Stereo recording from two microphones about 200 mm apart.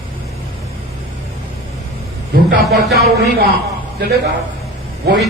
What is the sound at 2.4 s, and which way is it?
A man's voice, 50° right (ahead or behind).